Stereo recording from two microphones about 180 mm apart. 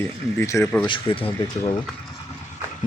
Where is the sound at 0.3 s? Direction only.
15° left (ahead or behind).